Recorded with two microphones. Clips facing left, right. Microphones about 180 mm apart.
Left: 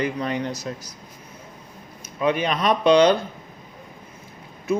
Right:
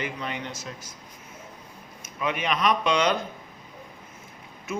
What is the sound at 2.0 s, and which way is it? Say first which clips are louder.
Speech: left 7 dB; 35° left (ahead or behind).